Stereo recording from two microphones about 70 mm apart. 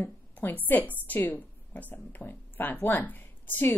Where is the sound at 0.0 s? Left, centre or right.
Left.